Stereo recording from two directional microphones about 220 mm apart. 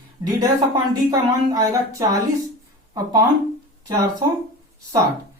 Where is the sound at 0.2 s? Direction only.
15° right (ahead or behind).